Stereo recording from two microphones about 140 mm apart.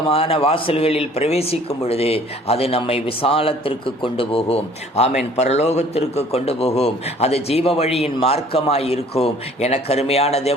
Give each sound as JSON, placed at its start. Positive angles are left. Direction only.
{"t": 0.1, "sound": "speech", "side_deg": 40}